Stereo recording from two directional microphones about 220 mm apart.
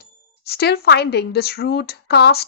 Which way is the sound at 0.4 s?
45° left (ahead or behind).